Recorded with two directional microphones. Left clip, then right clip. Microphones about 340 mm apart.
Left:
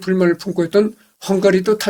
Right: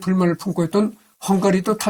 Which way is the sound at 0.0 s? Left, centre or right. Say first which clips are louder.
Left 5 dB; right.